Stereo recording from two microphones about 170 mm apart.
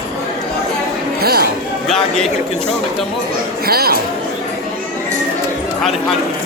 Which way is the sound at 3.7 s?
65° right (ahead or behind).